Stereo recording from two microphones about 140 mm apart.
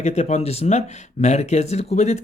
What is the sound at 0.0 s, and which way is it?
Speech, 50° left (ahead or behind).